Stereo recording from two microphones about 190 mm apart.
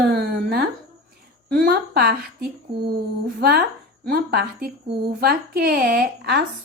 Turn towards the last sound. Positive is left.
turn(degrees=-55)  # may be behind; listen again after turning